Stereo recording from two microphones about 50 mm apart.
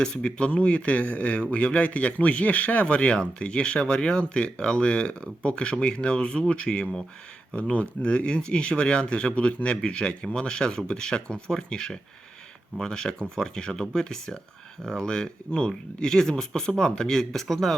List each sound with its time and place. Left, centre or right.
0.0 s speech: centre